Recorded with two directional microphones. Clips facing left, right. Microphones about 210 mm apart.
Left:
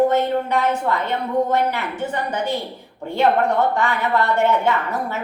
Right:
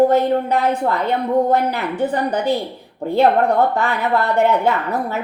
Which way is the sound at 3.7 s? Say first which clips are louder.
Right 1 dB; 35° right (ahead or behind).